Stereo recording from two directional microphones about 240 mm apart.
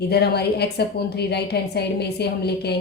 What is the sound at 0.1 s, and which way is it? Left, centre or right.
A woman's voice, left.